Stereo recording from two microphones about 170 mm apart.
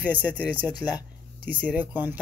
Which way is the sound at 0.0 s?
10° right (ahead or behind).